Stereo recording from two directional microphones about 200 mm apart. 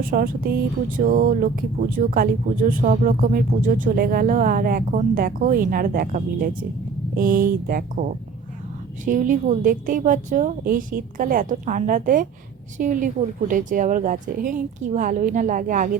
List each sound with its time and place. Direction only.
0.1 s a woman's voice: 45° right (ahead or behind)